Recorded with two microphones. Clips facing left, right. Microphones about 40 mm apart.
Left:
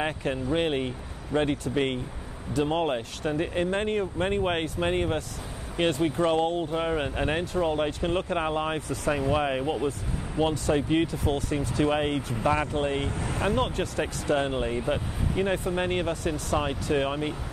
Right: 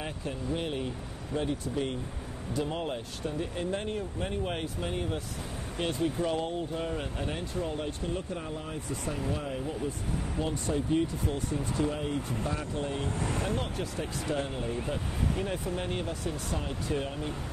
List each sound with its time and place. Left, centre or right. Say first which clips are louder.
0.0 s speech: left 7 dB; left
2.6 s speech: left 8 dB; left
13.7 s speech: left 5 dB; left
14.3 s speech: left 8 dB; left